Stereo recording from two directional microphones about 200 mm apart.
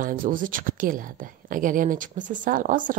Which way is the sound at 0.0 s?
40° right (ahead or behind).